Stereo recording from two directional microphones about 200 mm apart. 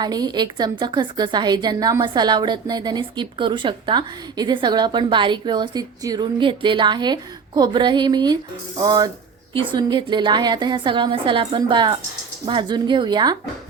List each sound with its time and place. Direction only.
0.0 s a woman's voice: 20° right (ahead or behind)